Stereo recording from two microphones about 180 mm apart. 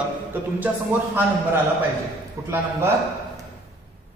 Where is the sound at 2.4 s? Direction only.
15° right (ahead or behind).